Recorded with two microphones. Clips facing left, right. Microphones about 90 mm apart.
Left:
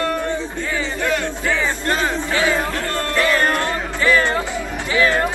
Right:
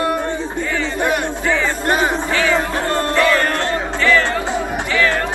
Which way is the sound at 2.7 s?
20° right (ahead or behind).